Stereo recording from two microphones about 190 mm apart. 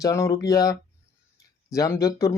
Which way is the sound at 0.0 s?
15° left (ahead or behind).